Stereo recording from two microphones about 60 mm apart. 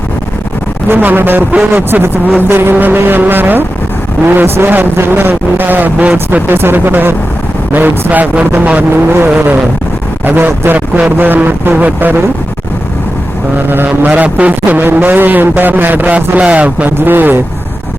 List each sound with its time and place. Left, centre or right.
0.9 s a man's voice: right
6.5 s a man's voice: right
8.9 s a man's voice: right
13.7 s a man's voice: right